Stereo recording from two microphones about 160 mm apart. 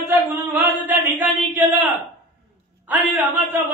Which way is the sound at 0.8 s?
10° right (ahead or behind).